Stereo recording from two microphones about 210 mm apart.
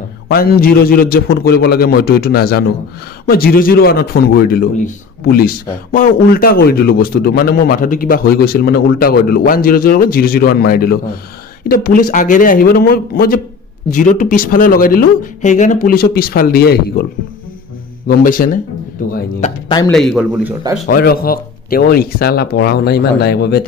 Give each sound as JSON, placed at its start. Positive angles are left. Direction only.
{"t": 0.3, "sound": "a man's voice", "side_deg": 45}
{"t": 19.9, "sound": "a man's voice", "side_deg": 0}
{"t": 20.9, "sound": "a man's voice", "side_deg": 45}